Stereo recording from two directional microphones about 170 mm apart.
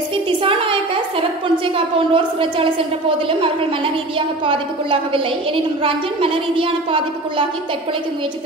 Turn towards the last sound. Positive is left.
turn(degrees=-30)  # may be behind; listen again after turning